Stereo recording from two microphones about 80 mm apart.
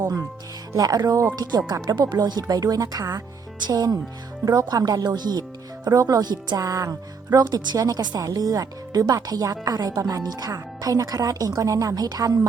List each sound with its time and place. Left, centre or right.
0.8 s speech: right
5.9 s speech: right
6.2 s speech: right